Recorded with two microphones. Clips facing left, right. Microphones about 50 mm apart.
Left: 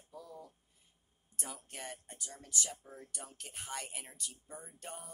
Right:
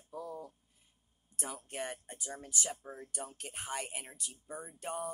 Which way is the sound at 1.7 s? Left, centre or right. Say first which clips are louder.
Right 6 dB; right.